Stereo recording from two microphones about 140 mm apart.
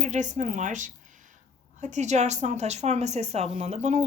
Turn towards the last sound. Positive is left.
turn(degrees=-55)  # may be behind; listen again after turning